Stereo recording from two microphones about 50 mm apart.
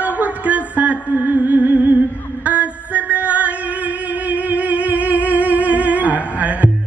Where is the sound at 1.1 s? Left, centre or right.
Right.